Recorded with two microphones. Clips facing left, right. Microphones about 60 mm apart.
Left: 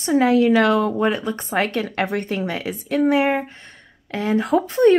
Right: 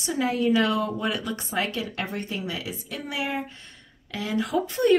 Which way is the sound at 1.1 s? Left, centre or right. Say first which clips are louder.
Left 6 dB; left.